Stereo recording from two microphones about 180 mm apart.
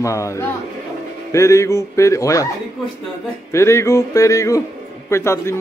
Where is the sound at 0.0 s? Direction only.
15° left (ahead or behind).